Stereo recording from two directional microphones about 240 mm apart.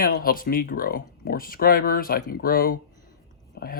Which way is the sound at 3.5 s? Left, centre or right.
Left.